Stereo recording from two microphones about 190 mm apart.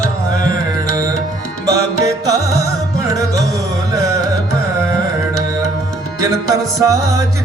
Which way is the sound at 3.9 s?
20° right (ahead or behind).